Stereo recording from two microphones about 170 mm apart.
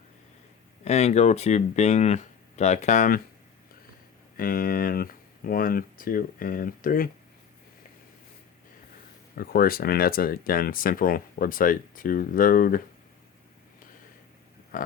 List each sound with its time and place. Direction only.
0.9 s speech: 40° left (ahead or behind)
4.4 s speech: 55° left (ahead or behind)
9.4 s speech: 60° left (ahead or behind)